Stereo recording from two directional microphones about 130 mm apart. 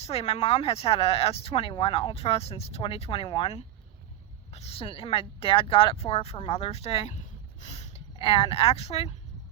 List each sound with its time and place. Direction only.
0.0 s speech: 55° left (ahead or behind)
4.5 s speech: 50° left (ahead or behind)